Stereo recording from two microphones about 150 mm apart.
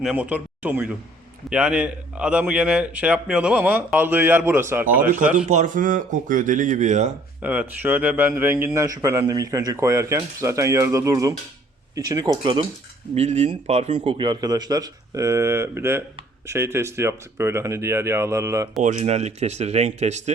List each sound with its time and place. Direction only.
0.0 s speech: 10° right (ahead or behind)
4.9 s speech: 65° right (ahead or behind)
5.1 s speech: 10° right (ahead or behind)
5.5 s speech: 55° right (ahead or behind)
7.4 s a man's voice: 10° right (ahead or behind); by 12.6 s 35° right (ahead or behind)
13.1 s a man's voice: 50° right (ahead or behind); by 18.7 s 20° right (ahead or behind)
18.8 s speech: 55° right (ahead or behind)